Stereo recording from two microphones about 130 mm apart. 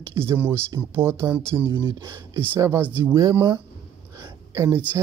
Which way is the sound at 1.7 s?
35° right (ahead or behind).